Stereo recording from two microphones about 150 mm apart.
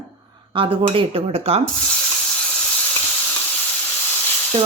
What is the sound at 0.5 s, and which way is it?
Speech, 35° right (ahead or behind).